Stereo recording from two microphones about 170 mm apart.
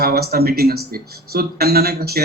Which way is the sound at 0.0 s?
60° right (ahead or behind).